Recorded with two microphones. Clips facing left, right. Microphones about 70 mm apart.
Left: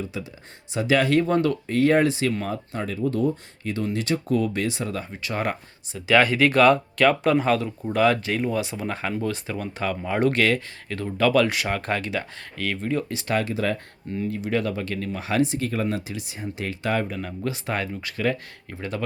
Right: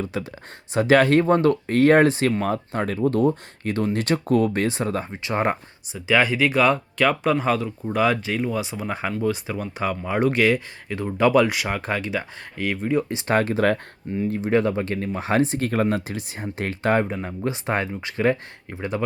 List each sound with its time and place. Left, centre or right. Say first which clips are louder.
0.0 s speech: right 4 dB; right
5.9 s speech: left 1 dB; centre
11.4 s speech: even; centre
13.2 s speech: right 5 dB; right
14.3 s speech: right 5 dB; right